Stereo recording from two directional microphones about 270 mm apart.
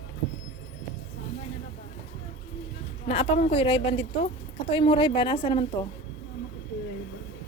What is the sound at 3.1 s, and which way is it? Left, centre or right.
A woman's voice, left.